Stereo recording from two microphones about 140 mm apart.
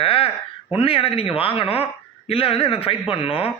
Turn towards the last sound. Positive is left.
turn(degrees=40)  # may be behind; listen again after turning